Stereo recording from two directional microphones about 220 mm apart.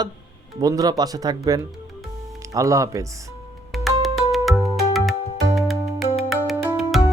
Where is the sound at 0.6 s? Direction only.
15° right (ahead or behind).